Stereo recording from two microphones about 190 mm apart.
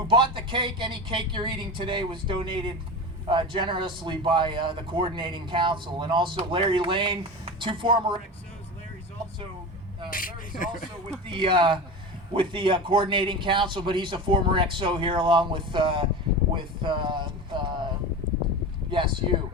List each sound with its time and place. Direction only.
0.1 s speech: 25° right (ahead or behind)
10.1 s speech: 45° left (ahead or behind)
11.3 s speech: 25° right (ahead or behind)
18.9 s speech: 25° right (ahead or behind)